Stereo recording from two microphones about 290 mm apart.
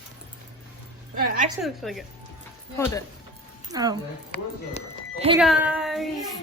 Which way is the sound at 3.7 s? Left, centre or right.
Centre.